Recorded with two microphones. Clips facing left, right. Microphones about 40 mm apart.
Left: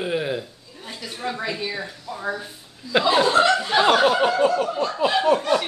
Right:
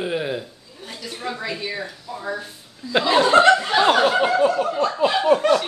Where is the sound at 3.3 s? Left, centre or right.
Right.